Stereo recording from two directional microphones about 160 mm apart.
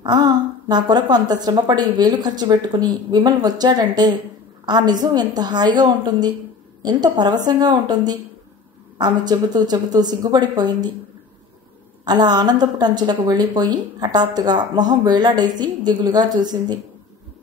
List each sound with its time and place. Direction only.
0.0 s a woman's voice: 25° right (ahead or behind)
12.0 s a woman's voice: 25° right (ahead or behind)